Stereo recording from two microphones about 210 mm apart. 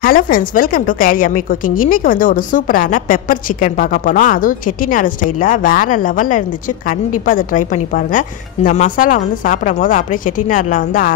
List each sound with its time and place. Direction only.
0.0 s a woman's voice: 45° left (ahead or behind)